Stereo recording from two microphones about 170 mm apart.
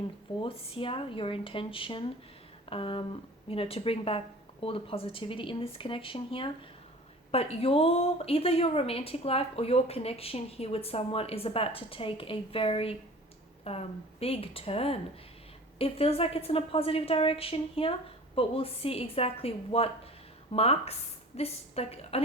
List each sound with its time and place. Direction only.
0.3 s a woman's voice: 30° left (ahead or behind)